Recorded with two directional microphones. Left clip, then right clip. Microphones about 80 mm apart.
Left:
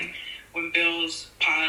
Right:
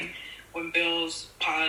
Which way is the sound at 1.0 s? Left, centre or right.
Right.